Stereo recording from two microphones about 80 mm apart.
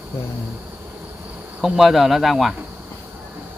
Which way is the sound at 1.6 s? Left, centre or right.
Centre.